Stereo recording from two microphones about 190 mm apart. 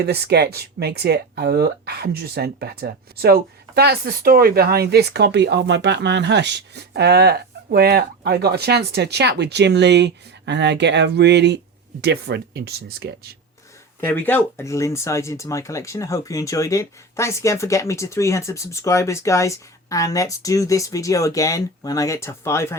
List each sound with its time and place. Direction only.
0.0 s speech: 55° right (ahead or behind)
14.1 s speech: 10° left (ahead or behind)